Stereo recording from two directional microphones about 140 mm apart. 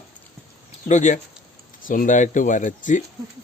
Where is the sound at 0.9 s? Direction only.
60° left (ahead or behind).